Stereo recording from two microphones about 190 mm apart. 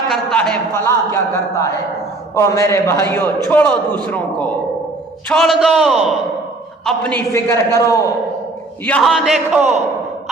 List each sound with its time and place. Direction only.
0.1 s a man's voice: 5° left (ahead or behind)
8.8 s a man's voice: 5° left (ahead or behind)